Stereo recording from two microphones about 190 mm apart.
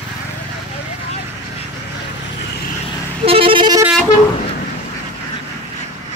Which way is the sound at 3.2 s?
30° right (ahead or behind).